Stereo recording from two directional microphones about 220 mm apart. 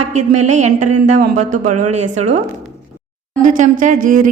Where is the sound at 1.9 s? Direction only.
30° right (ahead or behind).